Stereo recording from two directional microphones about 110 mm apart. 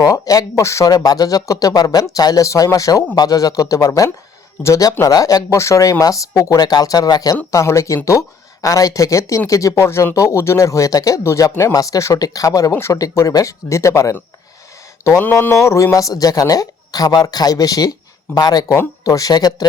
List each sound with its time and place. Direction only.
0.0 s speech: 35° left (ahead or behind)
15.2 s speech: 20° left (ahead or behind); by 19.6 s 35° left (ahead or behind)